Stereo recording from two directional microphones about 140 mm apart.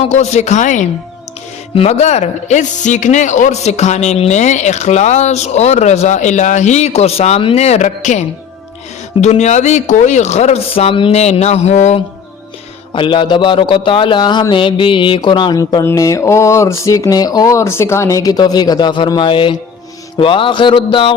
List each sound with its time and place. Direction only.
0.0 s a woman's voice: 55° left (ahead or behind)
1.7 s speech: 50° left (ahead or behind)
9.2 s speech: 55° left (ahead or behind)
12.9 s speech: 35° left (ahead or behind)
15.8 s a sound: 20° left (ahead or behind); by 19.5 s 35° left (ahead or behind)
20.1 s speech: 35° left (ahead or behind)